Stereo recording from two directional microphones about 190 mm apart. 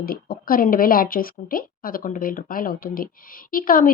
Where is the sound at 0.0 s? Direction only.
50° left (ahead or behind).